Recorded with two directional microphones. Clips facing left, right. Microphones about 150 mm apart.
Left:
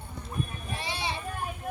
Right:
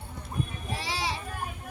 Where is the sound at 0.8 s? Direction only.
90° right.